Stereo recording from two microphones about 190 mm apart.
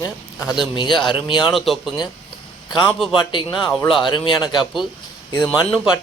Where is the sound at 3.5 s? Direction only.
Centre (ahead or behind).